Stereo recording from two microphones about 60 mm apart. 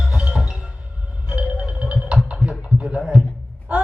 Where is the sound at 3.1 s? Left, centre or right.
Centre.